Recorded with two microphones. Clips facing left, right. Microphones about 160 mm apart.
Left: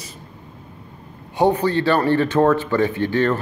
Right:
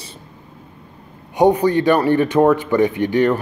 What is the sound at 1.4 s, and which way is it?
Speech, 15° right (ahead or behind).